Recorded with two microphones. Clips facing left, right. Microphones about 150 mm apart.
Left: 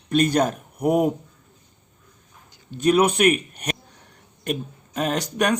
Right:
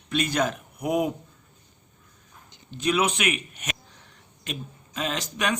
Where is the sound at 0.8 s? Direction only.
35° left (ahead or behind).